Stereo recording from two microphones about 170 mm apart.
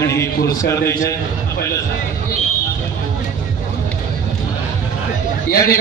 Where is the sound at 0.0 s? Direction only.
15° left (ahead or behind).